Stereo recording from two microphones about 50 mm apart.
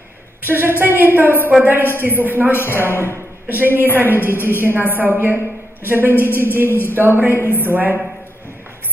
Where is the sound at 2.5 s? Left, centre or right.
Left.